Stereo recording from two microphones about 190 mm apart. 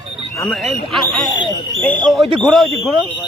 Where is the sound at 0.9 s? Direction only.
Centre (ahead or behind).